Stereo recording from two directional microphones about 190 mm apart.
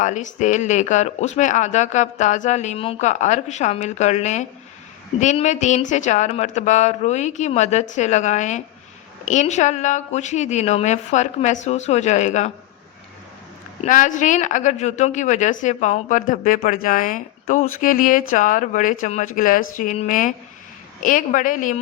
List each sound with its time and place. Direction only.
0.0 s speech: 40° left (ahead or behind)
13.8 s a woman's voice: 45° left (ahead or behind)